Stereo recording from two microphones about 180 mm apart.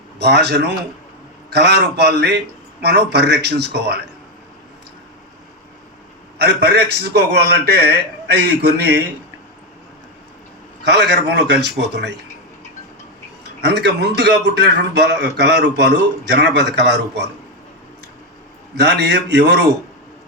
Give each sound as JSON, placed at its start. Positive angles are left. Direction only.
{"t": 0.2, "sound": "a man's voice", "side_deg": -70}
{"t": 6.4, "sound": "a man's voice", "side_deg": -65}
{"t": 10.9, "sound": "a man's voice", "side_deg": -70}
{"t": 13.6, "sound": "a man's voice", "side_deg": -70}
{"t": 18.7, "sound": "a man's voice", "side_deg": -70}